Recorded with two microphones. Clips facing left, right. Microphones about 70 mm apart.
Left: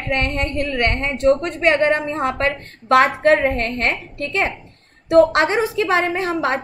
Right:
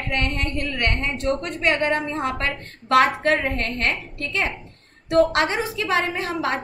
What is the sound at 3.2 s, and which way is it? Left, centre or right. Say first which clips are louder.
Speech: left 6 dB; left.